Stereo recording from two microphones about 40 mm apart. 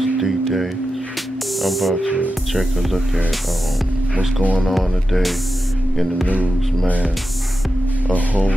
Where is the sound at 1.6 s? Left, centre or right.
Centre.